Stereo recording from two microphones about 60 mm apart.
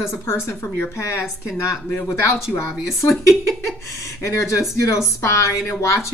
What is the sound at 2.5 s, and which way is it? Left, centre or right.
Speech, left.